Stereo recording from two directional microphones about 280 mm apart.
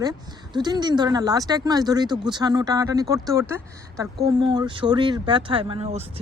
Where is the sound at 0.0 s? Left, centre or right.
Centre.